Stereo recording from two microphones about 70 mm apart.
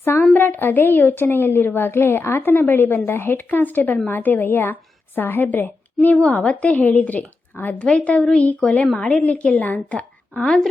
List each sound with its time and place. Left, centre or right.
0.3 s a woman's voice: left
8.2 s a sound: centre
8.7 s a woman's voice: left